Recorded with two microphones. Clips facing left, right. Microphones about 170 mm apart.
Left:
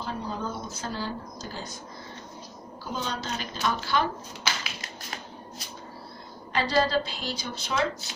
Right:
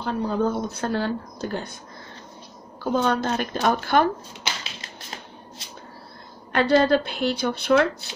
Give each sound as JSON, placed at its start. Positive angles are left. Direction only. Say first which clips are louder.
{"t": 0.0, "sound": "speech", "louder": "right 9 dB", "side_deg": -60}
{"t": 2.8, "sound": "speech", "louder": "right 11 dB", "side_deg": -60}
{"t": 4.5, "sound": "a sound", "louder": "even", "side_deg": -25}
{"t": 6.5, "sound": "speech", "louder": "right 6 dB", "side_deg": -60}